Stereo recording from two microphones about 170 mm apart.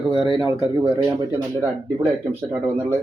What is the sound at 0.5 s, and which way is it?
Speech, 25° right (ahead or behind).